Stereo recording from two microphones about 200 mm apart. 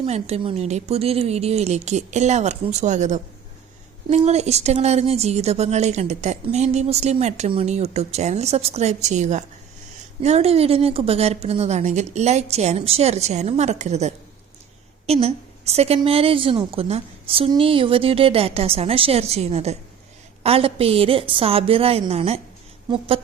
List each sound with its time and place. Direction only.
0.0 s a woman's voice: 30° right (ahead or behind)